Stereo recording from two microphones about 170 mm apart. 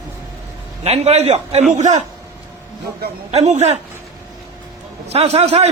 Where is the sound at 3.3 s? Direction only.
40° right (ahead or behind).